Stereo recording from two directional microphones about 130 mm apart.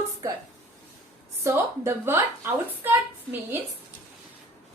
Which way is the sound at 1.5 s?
20° right (ahead or behind).